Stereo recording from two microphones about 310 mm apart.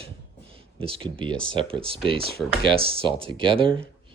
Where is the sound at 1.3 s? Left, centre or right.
Centre.